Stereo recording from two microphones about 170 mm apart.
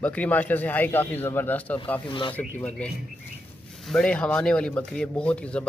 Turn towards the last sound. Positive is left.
turn(degrees=5)  # may be behind; listen again after turning